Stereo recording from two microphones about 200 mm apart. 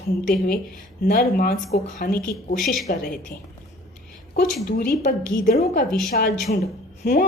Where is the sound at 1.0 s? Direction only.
45° left (ahead or behind).